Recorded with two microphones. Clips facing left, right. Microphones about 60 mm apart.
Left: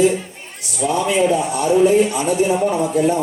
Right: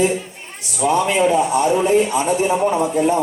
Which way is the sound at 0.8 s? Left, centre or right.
Right.